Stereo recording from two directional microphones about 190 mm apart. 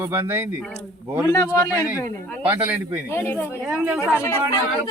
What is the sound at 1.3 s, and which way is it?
Speech, 20° left (ahead or behind).